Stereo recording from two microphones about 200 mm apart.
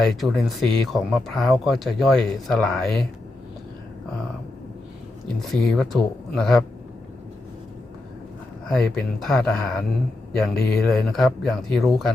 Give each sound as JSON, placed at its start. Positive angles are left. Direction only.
{"t": 0.0, "sound": "speech", "side_deg": 0}
{"t": 5.5, "sound": "speech", "side_deg": 0}
{"t": 8.7, "sound": "speech", "side_deg": 0}